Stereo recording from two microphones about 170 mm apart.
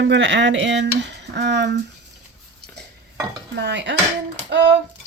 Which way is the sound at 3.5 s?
90° right.